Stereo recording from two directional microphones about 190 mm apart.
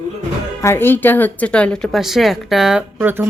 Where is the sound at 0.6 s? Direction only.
15° left (ahead or behind).